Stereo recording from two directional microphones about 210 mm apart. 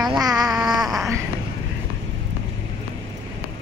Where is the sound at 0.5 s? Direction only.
Centre (ahead or behind).